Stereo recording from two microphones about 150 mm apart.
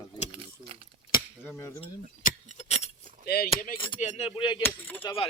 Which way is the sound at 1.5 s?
15° left (ahead or behind).